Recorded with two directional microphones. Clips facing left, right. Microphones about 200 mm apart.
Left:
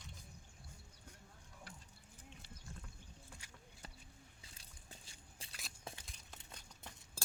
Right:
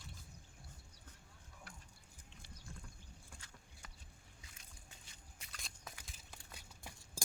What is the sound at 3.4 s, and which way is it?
Clip-clop, 10° left (ahead or behind).